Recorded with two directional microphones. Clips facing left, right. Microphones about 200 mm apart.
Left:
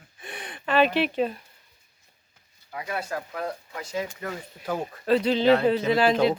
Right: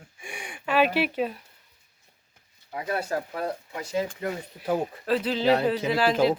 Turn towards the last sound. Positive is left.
turn(degrees=-5)  # may be behind; listen again after turning